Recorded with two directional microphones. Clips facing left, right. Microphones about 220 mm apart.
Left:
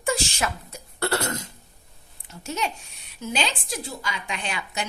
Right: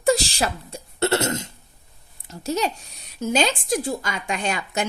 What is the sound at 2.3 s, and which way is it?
A woman's voice, 35° right (ahead or behind).